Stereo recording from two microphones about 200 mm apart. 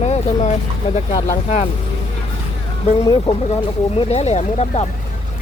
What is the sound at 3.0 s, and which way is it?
Speech, 20° left (ahead or behind).